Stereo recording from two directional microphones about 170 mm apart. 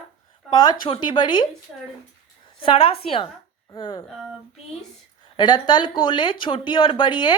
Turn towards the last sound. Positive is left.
turn(degrees=30)  # may be behind; listen again after turning